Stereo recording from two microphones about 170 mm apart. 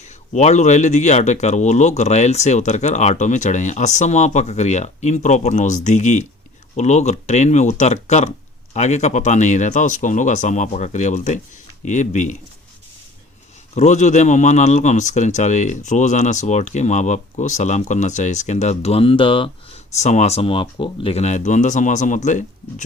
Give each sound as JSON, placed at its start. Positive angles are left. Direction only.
{"t": 0.0, "sound": "speech", "side_deg": 40}
{"t": 13.7, "sound": "speech", "side_deg": 45}
{"t": 20.0, "sound": "speech", "side_deg": 40}